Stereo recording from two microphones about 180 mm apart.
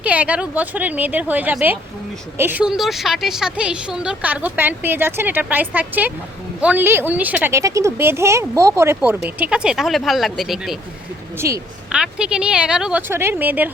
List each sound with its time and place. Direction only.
0.0 s a woman's voice: 10° right (ahead or behind)
11.3 s a woman's voice: 15° right (ahead or behind)
11.9 s speech: 5° right (ahead or behind)